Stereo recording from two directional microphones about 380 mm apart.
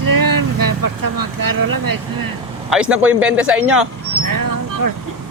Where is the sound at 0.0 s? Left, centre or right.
Right.